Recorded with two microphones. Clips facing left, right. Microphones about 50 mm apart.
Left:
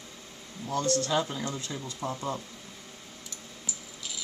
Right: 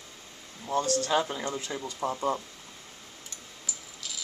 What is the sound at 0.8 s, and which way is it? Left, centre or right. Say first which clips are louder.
Speech: left 3 dB; left.